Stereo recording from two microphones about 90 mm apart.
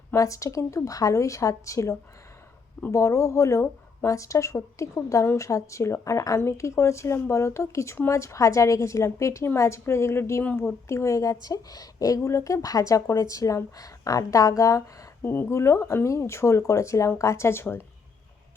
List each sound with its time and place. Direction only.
0.1 s a woman's voice: 35° left (ahead or behind)
10.4 s speech: 15° left (ahead or behind)
10.8 s a woman's voice: 30° left (ahead or behind)
15.2 s a woman's voice: 25° left (ahead or behind)